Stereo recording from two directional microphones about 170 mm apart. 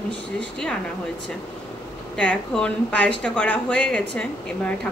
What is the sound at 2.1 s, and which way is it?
Speech, 5° left (ahead or behind).